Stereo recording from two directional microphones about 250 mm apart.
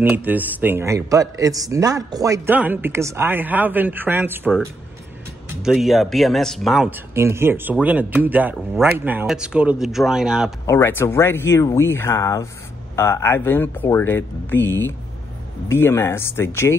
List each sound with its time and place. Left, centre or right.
0.1 s speech: centre
10.7 s speech: centre
14.6 s speech: left
15.7 s speech: centre